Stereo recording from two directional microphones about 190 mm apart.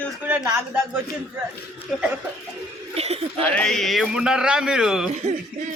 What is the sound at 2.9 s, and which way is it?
Speech, 30° right (ahead or behind).